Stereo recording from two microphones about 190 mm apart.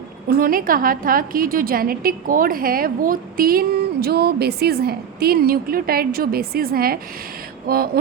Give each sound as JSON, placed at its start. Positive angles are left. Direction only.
{"t": 0.3, "sound": "a woman's voice", "side_deg": -50}